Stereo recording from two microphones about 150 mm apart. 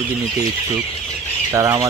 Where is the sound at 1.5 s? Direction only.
20° right (ahead or behind).